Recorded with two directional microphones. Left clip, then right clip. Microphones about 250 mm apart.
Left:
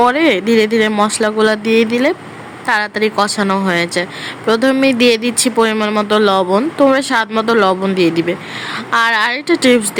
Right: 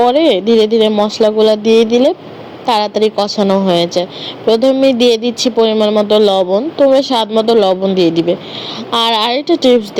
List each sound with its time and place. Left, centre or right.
0.0 s speech: left
1.6 s speech: centre
2.6 s speech: left